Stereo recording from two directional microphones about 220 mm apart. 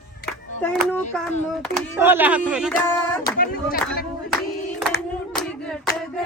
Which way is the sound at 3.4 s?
40° left (ahead or behind).